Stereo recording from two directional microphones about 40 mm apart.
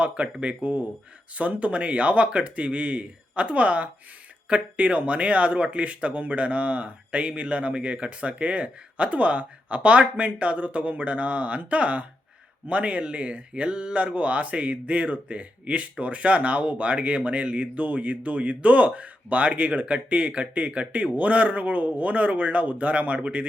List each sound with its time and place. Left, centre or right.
0.0 s speech: right
13.5 s speech: right